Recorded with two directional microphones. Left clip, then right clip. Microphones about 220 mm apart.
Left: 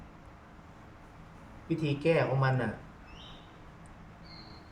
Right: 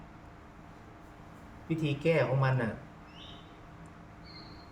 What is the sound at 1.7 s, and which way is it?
Speech, 5° left (ahead or behind).